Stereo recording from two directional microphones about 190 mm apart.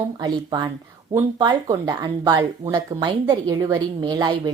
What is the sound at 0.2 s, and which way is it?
Speech, 20° right (ahead or behind).